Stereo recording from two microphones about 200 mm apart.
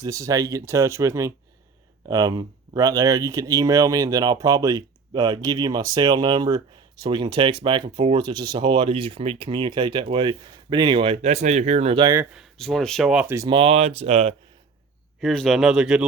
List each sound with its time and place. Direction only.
0.0 s speech: 15° right (ahead or behind)
12.2 s speech: 5° right (ahead or behind)
13.6 s speech: 30° right (ahead or behind)
15.2 s speech: centre (ahead or behind)